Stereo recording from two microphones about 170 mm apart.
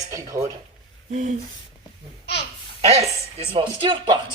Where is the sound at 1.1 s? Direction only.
45° right (ahead or behind).